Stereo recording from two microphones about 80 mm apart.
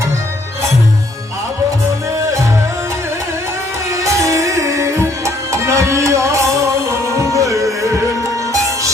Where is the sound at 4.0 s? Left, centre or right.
Right.